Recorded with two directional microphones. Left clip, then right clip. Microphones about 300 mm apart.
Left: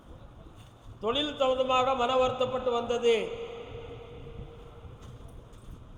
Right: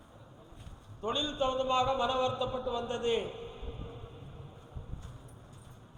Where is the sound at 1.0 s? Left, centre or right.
Left.